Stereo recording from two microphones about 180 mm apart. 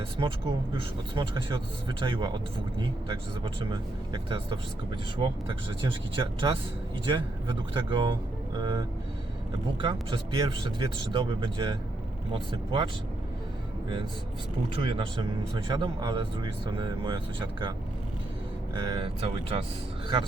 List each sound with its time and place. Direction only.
0.2 s speech: 25° right (ahead or behind)
5.8 s speech: 30° right (ahead or behind)
9.8 s speech: 25° right (ahead or behind)
14.8 s speech: 30° right (ahead or behind)